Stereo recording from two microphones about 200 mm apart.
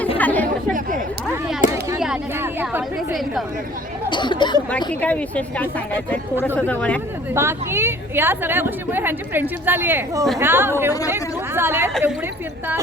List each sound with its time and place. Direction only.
0.2 s chatter: 10° left (ahead or behind)
1.6 s a sound: 40° left (ahead or behind)
2.0 s speech: 5° right (ahead or behind)
4.1 s speech: 20° left (ahead or behind)
4.9 s speech: 5° left (ahead or behind)
7.3 s a woman's voice: 10° right (ahead or behind)